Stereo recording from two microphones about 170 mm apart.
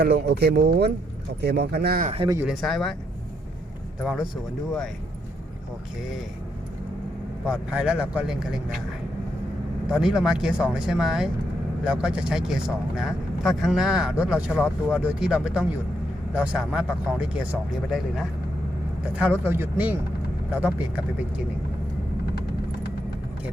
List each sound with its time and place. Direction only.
0.0 s speech: 75° right (ahead or behind)
2.4 s speech: centre (ahead or behind)
4.0 s speech: 5° right (ahead or behind)
7.4 s speech: 5° right (ahead or behind)
9.9 s speech: 5° right (ahead or behind)
19.2 s speech: 15° right (ahead or behind)